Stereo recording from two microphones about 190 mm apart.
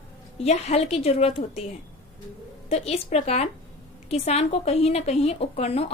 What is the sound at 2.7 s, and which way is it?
A woman's voice, 35° left (ahead or behind).